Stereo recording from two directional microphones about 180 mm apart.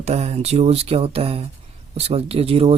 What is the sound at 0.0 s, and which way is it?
Speech, 35° right (ahead or behind).